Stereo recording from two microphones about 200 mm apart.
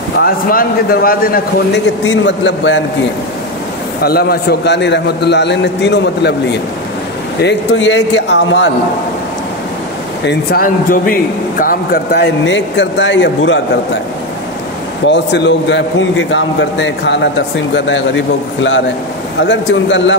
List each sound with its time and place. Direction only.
0.2 s a man's voice: 45° left (ahead or behind)
2.0 s a man's voice: 65° left (ahead or behind)
4.0 s a man's voice: 50° left (ahead or behind)
10.2 s a man's voice: 50° left (ahead or behind); by 13.6 s 65° left (ahead or behind)
15.0 s a man's voice: 60° left (ahead or behind)